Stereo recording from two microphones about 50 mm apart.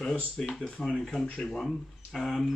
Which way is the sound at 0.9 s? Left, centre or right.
Centre.